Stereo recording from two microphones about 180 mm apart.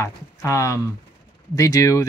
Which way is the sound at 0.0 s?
15° left (ahead or behind).